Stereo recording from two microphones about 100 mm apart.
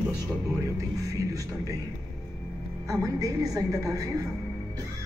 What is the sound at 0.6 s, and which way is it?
A woman's voice, 35° right (ahead or behind).